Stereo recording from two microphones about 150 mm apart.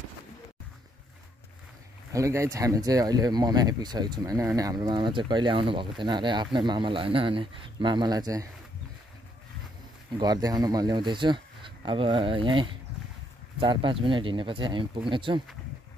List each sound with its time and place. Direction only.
2.1 s speech: 20° right (ahead or behind)
10.1 s speech: 25° right (ahead or behind)